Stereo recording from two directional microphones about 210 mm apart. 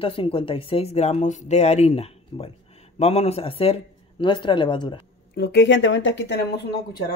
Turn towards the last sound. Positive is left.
turn(degrees=50)  # may be behind; listen again after turning